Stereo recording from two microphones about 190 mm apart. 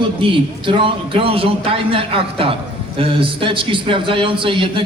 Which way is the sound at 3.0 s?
30° right (ahead or behind).